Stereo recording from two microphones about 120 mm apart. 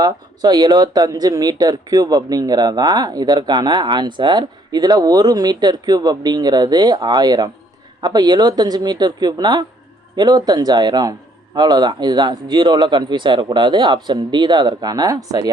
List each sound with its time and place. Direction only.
0.0 s speech: 35° right (ahead or behind)